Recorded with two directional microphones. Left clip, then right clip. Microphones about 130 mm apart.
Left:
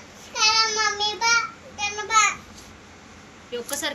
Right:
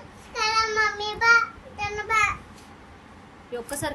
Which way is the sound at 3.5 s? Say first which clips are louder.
Left 2 dB; 70° right (ahead or behind).